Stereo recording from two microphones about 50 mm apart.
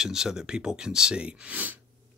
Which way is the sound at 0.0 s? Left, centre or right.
Centre.